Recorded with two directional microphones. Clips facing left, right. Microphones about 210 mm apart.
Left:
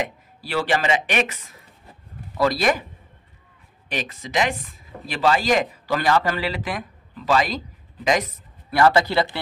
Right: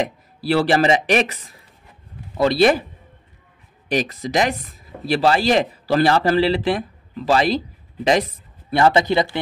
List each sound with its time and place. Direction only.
0.4 s a man's voice: 35° right (ahead or behind)
3.9 s speech: 40° right (ahead or behind); by 9.4 s 20° right (ahead or behind)